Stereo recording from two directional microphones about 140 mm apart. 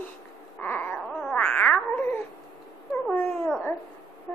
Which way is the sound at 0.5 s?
10° left (ahead or behind).